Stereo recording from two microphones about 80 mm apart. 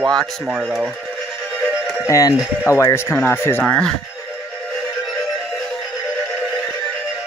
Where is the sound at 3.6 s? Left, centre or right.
Centre.